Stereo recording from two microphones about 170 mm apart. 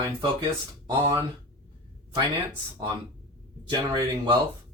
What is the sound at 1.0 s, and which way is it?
Speech, 15° right (ahead or behind).